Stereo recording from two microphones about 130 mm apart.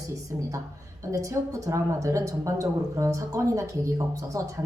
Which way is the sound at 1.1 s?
25° right (ahead or behind).